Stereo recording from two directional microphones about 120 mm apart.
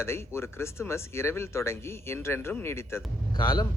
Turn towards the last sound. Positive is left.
turn(degrees=35)  # may be behind; listen again after turning